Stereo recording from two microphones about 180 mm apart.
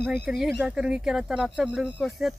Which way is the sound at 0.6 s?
5° right (ahead or behind).